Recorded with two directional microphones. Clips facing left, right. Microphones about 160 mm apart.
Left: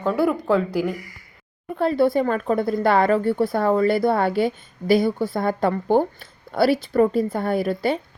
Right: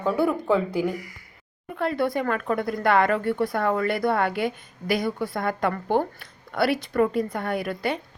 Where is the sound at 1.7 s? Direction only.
30° left (ahead or behind).